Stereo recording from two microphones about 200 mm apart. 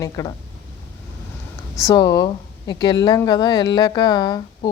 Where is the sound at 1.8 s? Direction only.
20° left (ahead or behind).